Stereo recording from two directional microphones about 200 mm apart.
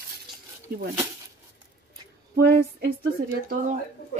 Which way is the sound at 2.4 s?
50° right (ahead or behind).